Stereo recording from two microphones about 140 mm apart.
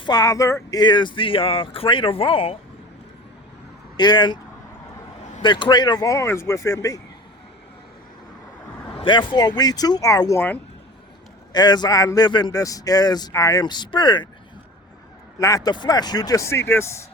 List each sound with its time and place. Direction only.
0.0 s speech: 30° left (ahead or behind)
3.9 s speech: 30° left (ahead or behind)
5.4 s a man's voice: 35° left (ahead or behind)
9.0 s a man's voice: 35° left (ahead or behind); by 10.6 s 15° left (ahead or behind)
11.5 s a man's voice: 30° left (ahead or behind)
15.4 s a man's voice: 25° left (ahead or behind)